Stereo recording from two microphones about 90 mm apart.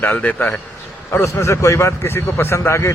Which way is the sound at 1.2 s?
35° left (ahead or behind).